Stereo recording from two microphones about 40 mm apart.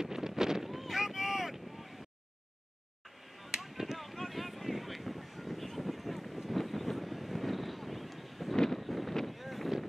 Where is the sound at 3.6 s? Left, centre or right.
Centre.